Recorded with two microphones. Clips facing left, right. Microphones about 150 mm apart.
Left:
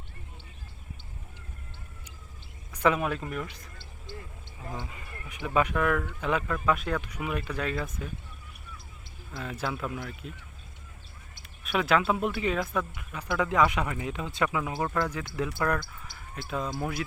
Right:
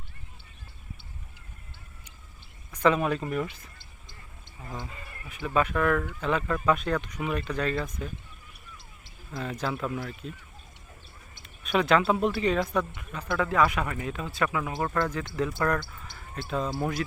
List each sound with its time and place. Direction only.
2.7 s speech: 10° left (ahead or behind)
4.7 s speech: 15° left (ahead or behind)
9.3 s speech: 5° left (ahead or behind)
11.6 s speech: 5° left (ahead or behind)
16.6 s speech: 10° right (ahead or behind)